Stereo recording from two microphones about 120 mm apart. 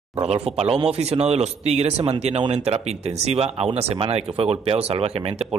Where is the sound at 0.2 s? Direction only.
60° right (ahead or behind).